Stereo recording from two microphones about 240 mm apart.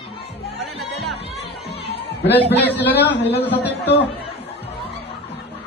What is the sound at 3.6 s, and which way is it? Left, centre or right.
Speech, left.